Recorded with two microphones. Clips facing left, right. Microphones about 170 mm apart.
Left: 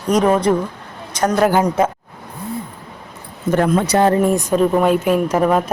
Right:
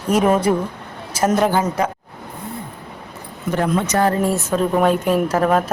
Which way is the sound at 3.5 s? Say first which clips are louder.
Left 3 dB; 50° left (ahead or behind).